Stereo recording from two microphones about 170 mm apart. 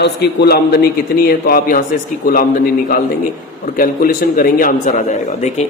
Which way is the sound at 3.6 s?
60° left (ahead or behind).